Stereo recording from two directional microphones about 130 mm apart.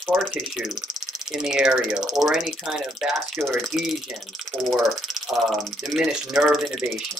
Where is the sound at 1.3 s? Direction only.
5° right (ahead or behind).